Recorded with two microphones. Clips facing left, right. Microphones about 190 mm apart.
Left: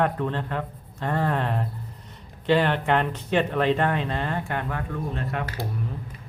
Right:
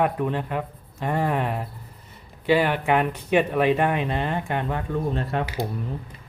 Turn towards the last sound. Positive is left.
turn(degrees=-30)  # may be behind; listen again after turning